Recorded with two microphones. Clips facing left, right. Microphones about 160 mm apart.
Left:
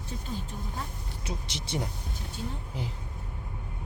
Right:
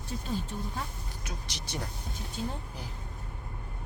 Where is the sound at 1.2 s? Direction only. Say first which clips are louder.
Left 6 dB; 25° left (ahead or behind).